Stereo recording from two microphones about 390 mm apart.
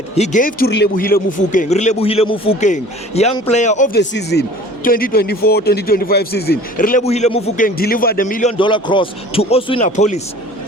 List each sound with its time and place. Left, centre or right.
0.2 s a man's voice: centre